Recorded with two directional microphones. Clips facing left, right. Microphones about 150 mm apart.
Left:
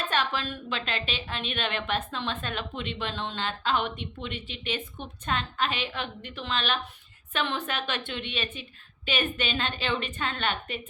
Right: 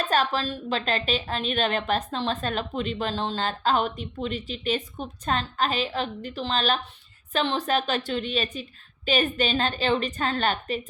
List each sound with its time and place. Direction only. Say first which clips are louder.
0.1 s a woman's voice: right 5 dB; 40° right (ahead or behind)